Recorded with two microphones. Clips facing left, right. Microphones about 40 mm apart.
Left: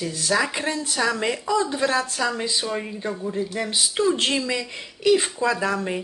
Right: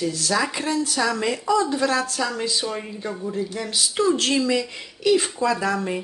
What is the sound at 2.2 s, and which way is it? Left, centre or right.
A man's voice, centre.